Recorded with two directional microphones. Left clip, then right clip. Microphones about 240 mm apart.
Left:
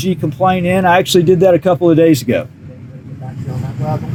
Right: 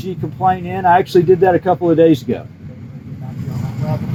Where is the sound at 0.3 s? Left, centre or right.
Left.